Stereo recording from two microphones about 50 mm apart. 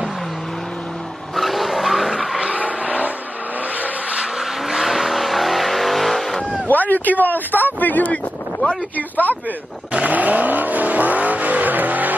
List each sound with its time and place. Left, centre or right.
1.3 s vehicle: centre
2.4 s vehicle: right
4.2 s vehicle: centre
6.7 s a sound: left
7.8 s wind noise: left
8.9 s speech: left
9.9 s vehicle: right